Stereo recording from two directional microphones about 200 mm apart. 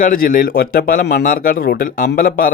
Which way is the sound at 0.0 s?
40° left (ahead or behind).